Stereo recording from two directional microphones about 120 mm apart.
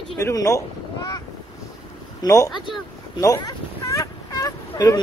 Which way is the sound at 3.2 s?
30° left (ahead or behind).